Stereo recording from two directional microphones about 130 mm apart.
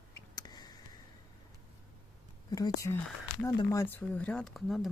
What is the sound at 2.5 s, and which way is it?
Speech, 25° left (ahead or behind).